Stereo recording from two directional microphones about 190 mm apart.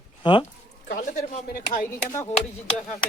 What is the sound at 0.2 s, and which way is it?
Speech, 25° left (ahead or behind).